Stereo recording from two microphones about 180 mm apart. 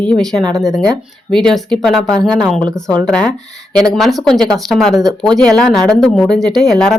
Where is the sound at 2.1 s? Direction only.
20° right (ahead or behind).